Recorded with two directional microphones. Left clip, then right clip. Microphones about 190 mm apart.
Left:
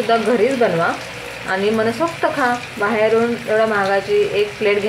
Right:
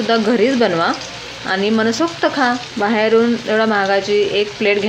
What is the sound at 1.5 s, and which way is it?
Speech, 40° right (ahead or behind).